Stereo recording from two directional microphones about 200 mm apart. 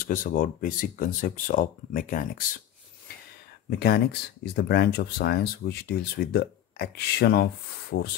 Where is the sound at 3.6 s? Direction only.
50° left (ahead or behind).